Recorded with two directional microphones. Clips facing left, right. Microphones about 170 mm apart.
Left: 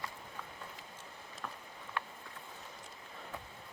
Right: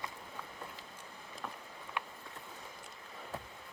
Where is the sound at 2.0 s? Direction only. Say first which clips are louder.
Left 1 dB; 15° right (ahead or behind).